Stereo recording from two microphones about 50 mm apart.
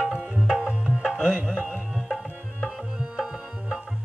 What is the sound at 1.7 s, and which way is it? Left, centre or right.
Tabla, centre.